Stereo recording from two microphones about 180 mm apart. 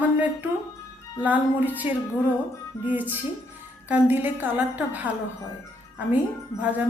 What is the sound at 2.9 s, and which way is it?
Speech, 10° right (ahead or behind).